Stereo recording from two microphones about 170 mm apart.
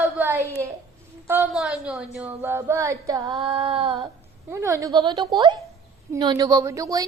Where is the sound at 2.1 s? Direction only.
10° right (ahead or behind); by 4.1 s 30° right (ahead or behind).